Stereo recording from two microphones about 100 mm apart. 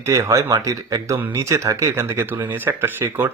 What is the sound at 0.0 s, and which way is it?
Speech, 30° right (ahead or behind).